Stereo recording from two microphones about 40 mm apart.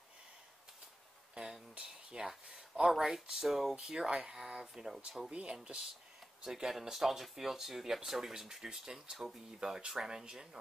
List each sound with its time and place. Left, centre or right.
1.3 s a sound: right
3.0 s speech: centre
4.9 s speech: centre
5.3 s speech: right
6.4 s speech: centre